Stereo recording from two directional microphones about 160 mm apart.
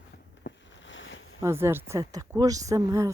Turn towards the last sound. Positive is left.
turn(degrees=-20)  # may be behind; listen again after turning